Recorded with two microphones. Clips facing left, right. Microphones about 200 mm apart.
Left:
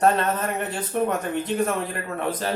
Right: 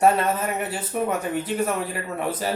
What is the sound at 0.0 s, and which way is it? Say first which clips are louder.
Speech: right 1 dB; 10° right (ahead or behind).